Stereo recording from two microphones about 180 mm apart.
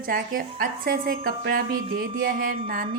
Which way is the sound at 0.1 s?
55° right (ahead or behind).